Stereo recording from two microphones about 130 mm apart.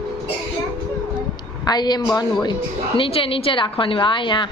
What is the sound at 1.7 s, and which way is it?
A woman's voice, 35° left (ahead or behind).